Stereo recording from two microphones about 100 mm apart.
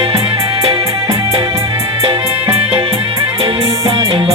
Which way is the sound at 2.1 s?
70° right (ahead or behind).